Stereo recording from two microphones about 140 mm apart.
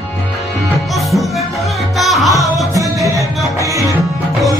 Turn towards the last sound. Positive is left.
turn(degrees=-25)  # may be behind; listen again after turning